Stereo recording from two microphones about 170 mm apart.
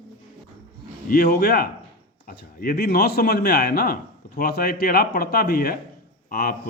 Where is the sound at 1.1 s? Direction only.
70° left (ahead or behind).